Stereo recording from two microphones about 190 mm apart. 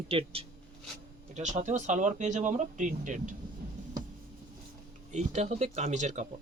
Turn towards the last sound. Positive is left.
turn(degrees=-40)  # may be behind; listen again after turning